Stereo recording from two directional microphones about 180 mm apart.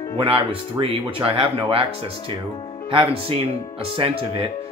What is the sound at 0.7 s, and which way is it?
Speech, 30° right (ahead or behind).